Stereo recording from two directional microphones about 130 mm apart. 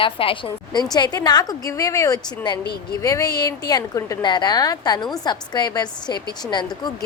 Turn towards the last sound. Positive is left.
turn(degrees=35)  # may be behind; listen again after turning